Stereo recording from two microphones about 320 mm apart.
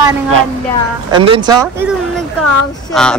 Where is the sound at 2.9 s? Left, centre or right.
Centre.